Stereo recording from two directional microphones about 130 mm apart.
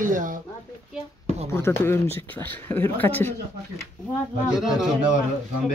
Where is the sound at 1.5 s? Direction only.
20° left (ahead or behind).